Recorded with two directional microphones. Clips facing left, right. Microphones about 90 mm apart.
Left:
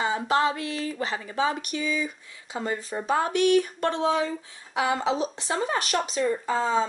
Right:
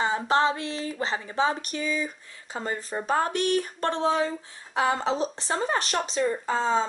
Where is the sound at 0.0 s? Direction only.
35° right (ahead or behind).